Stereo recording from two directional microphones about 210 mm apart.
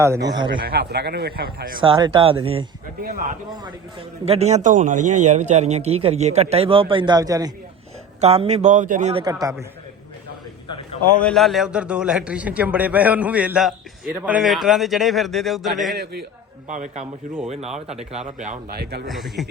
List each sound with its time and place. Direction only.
0.0 s speech: 15° right (ahead or behind)
0.6 s a man's voice: 50° right (ahead or behind)
1.8 s speech: 25° right (ahead or behind)
3.0 s a man's voice: 40° right (ahead or behind); by 7.5 s 15° right (ahead or behind)
8.2 s a man's voice: 30° right (ahead or behind)
9.2 s a man's voice: 15° right (ahead or behind)
11.2 s a man's voice: 5° left (ahead or behind)
16.6 s a man's voice: 35° right (ahead or behind)
18.8 s a man's voice: 50° right (ahead or behind)
19.0 s a man's voice: centre (ahead or behind)